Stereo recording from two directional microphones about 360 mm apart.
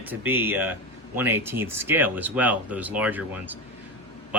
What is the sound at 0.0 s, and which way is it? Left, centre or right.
Speech, centre.